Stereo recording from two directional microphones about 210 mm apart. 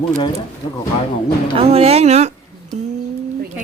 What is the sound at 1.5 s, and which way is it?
Speech, 30° right (ahead or behind).